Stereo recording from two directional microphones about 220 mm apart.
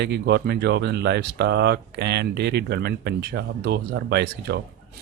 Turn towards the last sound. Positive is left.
turn(degrees=-50)  # may be behind; listen again after turning